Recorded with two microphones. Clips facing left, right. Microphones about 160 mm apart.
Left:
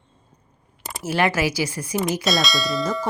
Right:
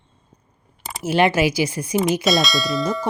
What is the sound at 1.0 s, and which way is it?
Speech, 20° right (ahead or behind).